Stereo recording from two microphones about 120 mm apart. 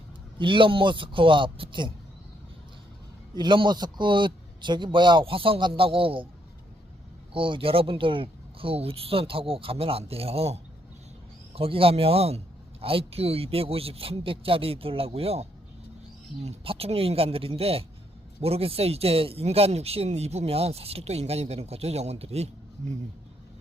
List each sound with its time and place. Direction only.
0.3 s speech: 45° right (ahead or behind)
3.3 s a man's voice: 40° right (ahead or behind)
7.3 s speech: 45° right (ahead or behind)